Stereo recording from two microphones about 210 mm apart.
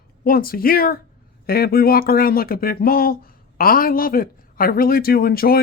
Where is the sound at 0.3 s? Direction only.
45° left (ahead or behind).